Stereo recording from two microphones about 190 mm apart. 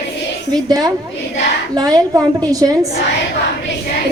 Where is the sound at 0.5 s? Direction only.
20° right (ahead or behind).